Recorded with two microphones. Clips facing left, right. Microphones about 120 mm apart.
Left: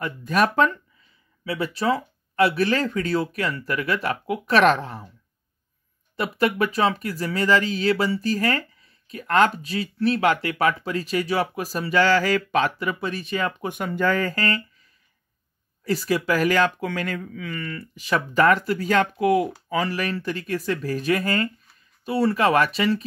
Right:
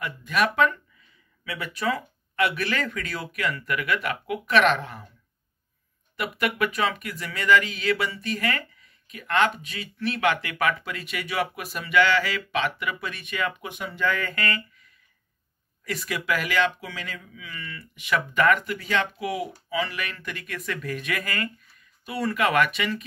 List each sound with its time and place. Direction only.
0.0 s speech: 40° left (ahead or behind)
6.1 s speech: 30° left (ahead or behind)
13.7 s speech: 50° left (ahead or behind)